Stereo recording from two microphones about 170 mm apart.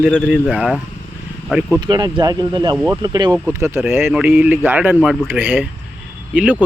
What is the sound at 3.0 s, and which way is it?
Speech, 25° right (ahead or behind).